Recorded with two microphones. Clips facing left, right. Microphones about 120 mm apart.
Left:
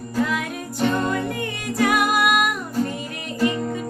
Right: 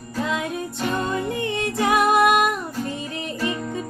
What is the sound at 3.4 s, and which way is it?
Music, 30° left (ahead or behind).